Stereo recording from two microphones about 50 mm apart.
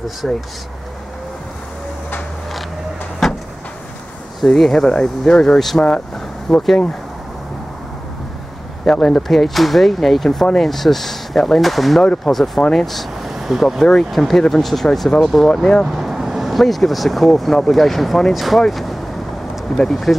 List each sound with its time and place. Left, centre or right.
0.2 s speech: centre
3.2 s vehicle: centre
4.5 s speech: centre
8.9 s speech: centre
9.3 s speech: centre
15.9 s speech: centre